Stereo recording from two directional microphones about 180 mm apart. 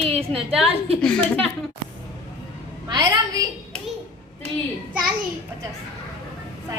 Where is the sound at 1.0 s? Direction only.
5° left (ahead or behind).